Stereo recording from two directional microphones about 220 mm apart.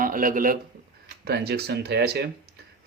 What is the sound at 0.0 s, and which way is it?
Speech, 40° right (ahead or behind).